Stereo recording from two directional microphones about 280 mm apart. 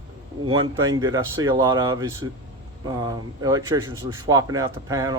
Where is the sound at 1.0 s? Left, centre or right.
Centre.